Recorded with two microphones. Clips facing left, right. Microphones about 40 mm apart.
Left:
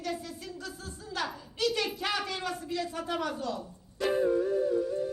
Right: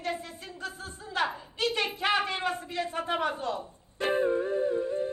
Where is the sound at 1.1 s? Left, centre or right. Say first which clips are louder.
Right 5 dB; right.